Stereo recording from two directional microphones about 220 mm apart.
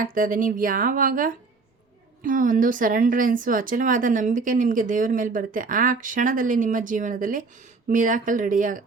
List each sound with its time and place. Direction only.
0.0 s speech: 40° right (ahead or behind)